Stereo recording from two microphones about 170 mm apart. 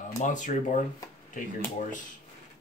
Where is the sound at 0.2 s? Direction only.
45° left (ahead or behind).